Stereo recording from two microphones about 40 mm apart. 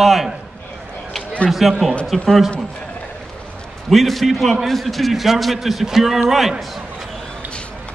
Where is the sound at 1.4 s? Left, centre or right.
Centre.